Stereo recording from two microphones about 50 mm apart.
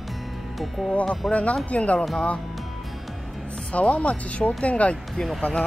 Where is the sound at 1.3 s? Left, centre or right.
Left.